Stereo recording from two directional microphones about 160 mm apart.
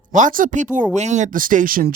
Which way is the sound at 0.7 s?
50° right (ahead or behind).